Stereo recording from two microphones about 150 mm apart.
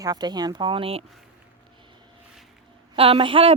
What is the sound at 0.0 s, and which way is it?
Speech, 25° right (ahead or behind).